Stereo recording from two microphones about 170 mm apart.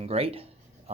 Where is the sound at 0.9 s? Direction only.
40° right (ahead or behind).